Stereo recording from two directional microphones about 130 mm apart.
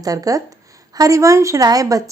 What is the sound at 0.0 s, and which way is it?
A woman's voice, 30° right (ahead or behind).